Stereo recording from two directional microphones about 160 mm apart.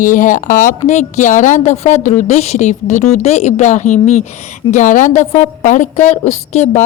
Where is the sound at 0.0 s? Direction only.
55° left (ahead or behind).